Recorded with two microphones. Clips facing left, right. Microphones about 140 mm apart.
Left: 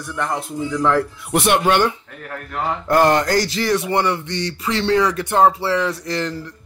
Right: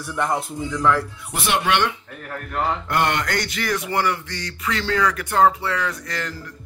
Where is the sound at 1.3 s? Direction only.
60° left (ahead or behind).